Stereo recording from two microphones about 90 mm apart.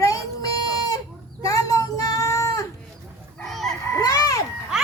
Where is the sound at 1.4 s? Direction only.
40° left (ahead or behind).